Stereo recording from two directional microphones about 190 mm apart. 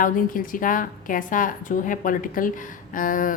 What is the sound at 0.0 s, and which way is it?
A woman's voice, 45° left (ahead or behind).